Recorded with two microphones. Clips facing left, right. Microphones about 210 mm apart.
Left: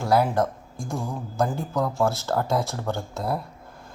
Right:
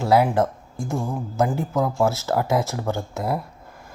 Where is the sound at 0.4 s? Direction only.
5° right (ahead or behind).